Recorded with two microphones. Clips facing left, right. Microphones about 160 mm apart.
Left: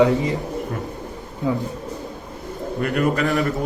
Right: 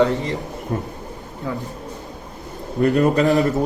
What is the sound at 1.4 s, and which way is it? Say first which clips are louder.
Speech: left 5 dB; 20° left (ahead or behind).